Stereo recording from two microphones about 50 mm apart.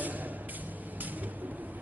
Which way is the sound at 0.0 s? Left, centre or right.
Right.